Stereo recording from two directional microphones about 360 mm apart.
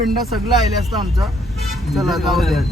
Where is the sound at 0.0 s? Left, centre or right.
Centre.